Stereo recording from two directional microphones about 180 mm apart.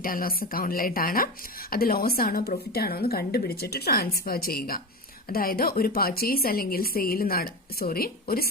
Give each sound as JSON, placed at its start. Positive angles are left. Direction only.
{"t": 0.0, "sound": "a woman's voice", "side_deg": 55}